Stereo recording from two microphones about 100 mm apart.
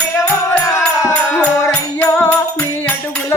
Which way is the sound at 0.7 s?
35° left (ahead or behind).